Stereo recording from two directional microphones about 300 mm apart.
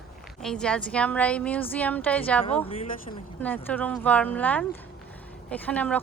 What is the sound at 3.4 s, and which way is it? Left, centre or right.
A woman's voice, centre.